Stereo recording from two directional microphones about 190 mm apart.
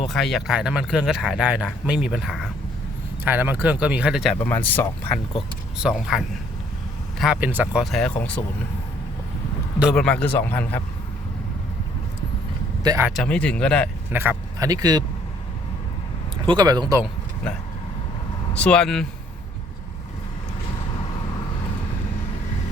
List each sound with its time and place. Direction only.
0.0 s speech: centre (ahead or behind)
4.4 s speech: 10° left (ahead or behind)
5.7 s speech: 5° right (ahead or behind)
9.7 s speech: centre (ahead or behind)
12.8 s speech: 20° right (ahead or behind)
13.1 s speech: 5° left (ahead or behind)
14.1 s speech: 10° right (ahead or behind)
16.5 s speech: 20° right (ahead or behind)
18.5 s speech: 5° left (ahead or behind)